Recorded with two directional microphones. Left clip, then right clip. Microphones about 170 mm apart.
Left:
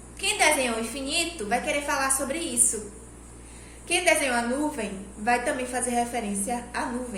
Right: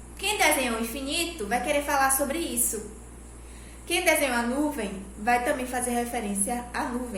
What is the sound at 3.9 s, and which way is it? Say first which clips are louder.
A woman's voice: left 1 dB; 20° right (ahead or behind).